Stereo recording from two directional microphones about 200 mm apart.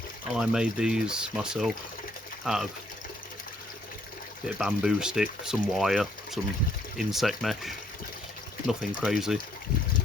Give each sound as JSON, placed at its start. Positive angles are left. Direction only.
{"t": 0.3, "sound": "speech", "side_deg": -5}
{"t": 4.5, "sound": "speech", "side_deg": 0}